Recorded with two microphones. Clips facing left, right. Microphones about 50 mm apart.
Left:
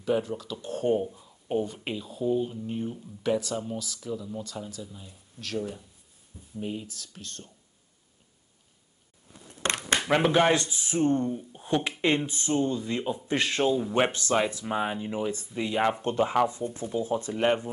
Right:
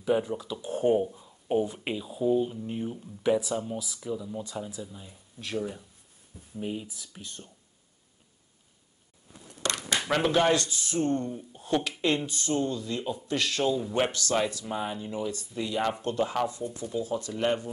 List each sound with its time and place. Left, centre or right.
0.0 s speech: centre
9.6 s a sound: left
10.0 s speech: centre